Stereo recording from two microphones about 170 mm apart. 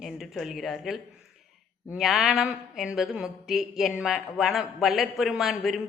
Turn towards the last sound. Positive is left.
turn(degrees=0)  # may be behind; listen again after turning